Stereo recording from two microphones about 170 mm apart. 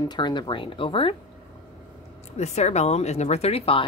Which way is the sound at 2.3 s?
40° left (ahead or behind).